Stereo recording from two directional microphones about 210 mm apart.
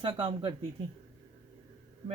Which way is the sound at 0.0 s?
25° right (ahead or behind).